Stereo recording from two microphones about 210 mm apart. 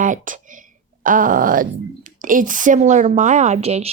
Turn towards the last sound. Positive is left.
turn(degrees=-30)  # may be behind; listen again after turning